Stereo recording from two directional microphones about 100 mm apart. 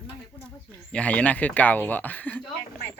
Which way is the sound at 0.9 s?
15° left (ahead or behind).